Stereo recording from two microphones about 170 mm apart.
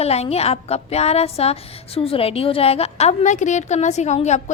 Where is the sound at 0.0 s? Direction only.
35° left (ahead or behind).